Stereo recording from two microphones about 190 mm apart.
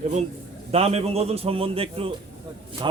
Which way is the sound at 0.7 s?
35° right (ahead or behind).